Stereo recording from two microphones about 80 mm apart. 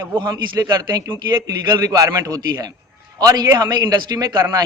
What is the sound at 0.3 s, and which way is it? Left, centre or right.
A man's voice, right.